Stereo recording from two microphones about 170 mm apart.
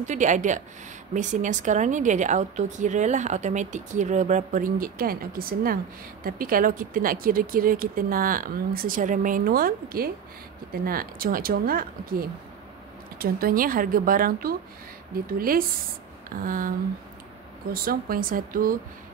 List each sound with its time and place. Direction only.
0.0 s speech: 45° right (ahead or behind)
17.7 s speech: 60° right (ahead or behind)